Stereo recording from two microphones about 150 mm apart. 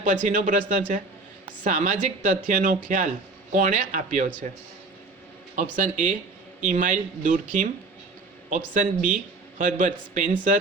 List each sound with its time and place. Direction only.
0.0 s speech: 60° right (ahead or behind)
5.7 s speech: 60° right (ahead or behind)